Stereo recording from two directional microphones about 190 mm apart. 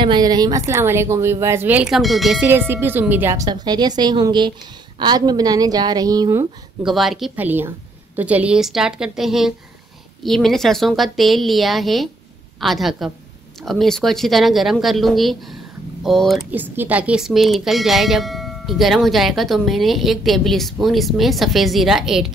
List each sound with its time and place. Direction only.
0.0 s speech: 20° right (ahead or behind); by 2.4 s centre (ahead or behind)
2.4 s a woman's voice: 10° right (ahead or behind)
6.8 s speech: centre (ahead or behind)